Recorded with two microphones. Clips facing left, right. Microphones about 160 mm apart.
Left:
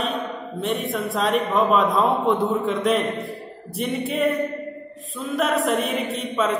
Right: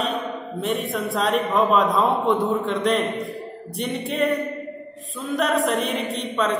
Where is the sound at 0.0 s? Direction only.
Centre (ahead or behind).